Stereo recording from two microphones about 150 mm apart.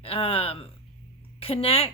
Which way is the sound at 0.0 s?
40° left (ahead or behind).